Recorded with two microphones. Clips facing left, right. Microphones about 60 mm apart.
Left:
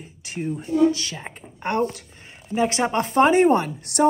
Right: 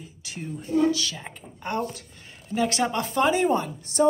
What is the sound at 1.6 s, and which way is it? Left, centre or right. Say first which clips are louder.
Speech: left 6 dB; left.